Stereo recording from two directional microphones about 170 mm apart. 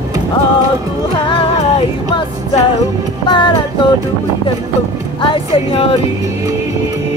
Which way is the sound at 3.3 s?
30° left (ahead or behind).